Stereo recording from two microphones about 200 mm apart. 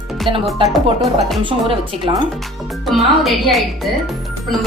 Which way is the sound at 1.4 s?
25° right (ahead or behind).